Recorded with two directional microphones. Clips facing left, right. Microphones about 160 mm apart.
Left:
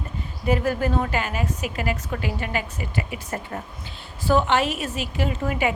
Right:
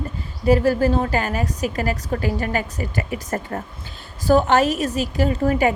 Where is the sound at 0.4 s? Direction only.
35° right (ahead or behind).